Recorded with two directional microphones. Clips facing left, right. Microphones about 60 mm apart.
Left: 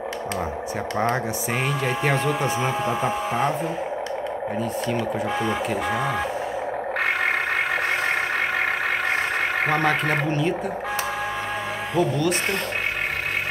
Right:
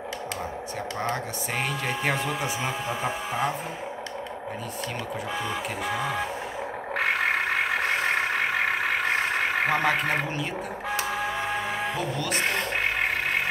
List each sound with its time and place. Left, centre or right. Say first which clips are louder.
1.9 s speech: left 5 dB; centre
2.9 s speech: left 5 dB; left
5.4 s speech: left 6 dB; left
7.0 s vehicle: left 1 dB; centre
11.9 s speech: left 7 dB; centre